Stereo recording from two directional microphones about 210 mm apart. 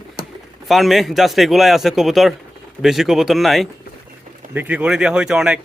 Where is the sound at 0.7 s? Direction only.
Centre (ahead or behind).